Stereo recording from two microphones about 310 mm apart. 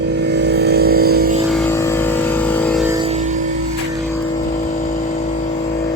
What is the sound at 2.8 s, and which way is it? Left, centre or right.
Music, centre.